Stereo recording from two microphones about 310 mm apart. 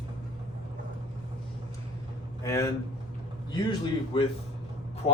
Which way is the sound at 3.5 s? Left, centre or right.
Centre.